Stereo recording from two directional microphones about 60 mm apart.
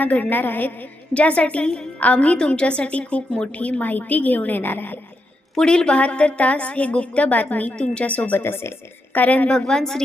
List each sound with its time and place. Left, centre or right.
0.0 s a woman's voice: left
1.1 s a woman's voice: left
2.0 s a woman's voice: left
5.5 s a woman's voice: centre
8.4 s a woman's voice: left
9.1 s a woman's voice: left
9.5 s a woman's voice: centre